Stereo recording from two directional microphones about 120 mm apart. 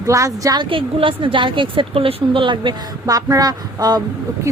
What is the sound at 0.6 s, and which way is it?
Speech, 45° right (ahead or behind).